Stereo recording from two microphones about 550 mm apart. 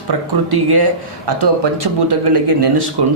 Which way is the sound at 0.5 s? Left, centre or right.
Right.